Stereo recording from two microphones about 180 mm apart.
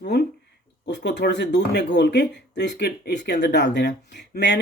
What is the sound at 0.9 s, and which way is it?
Speech, 75° left (ahead or behind).